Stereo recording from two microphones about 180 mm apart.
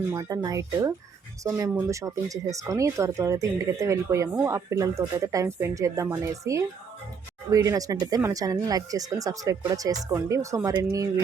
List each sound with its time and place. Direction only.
0.1 s speech: 20° right (ahead or behind)